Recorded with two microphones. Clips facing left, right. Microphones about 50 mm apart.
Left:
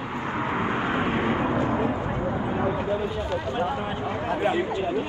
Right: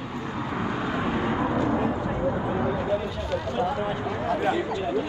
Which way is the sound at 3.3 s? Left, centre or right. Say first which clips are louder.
Right 3 dB; left.